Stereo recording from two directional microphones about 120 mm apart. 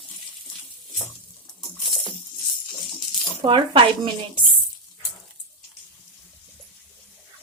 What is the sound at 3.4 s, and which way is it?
Speech, 45° right (ahead or behind).